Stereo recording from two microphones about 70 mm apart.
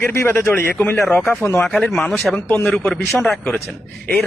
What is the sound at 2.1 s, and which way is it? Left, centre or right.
Speech, left.